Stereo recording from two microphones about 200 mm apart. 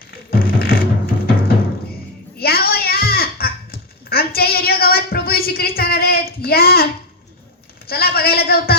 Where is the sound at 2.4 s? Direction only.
50° left (ahead or behind).